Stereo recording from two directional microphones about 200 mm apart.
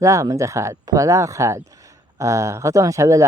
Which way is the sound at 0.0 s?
15° right (ahead or behind).